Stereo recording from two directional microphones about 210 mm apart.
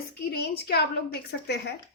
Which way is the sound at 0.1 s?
50° left (ahead or behind).